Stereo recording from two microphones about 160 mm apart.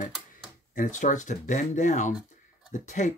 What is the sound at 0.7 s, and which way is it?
Speech, 55° left (ahead or behind).